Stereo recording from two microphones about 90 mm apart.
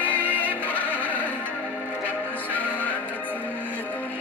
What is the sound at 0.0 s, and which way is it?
Music, 20° left (ahead or behind).